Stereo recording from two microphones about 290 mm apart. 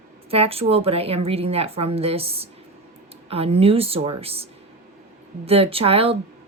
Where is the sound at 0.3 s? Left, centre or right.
Centre.